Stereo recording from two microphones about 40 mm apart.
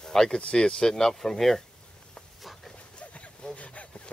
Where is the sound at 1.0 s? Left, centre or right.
Centre.